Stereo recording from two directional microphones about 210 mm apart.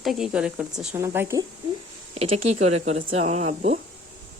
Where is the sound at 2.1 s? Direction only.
30° right (ahead or behind).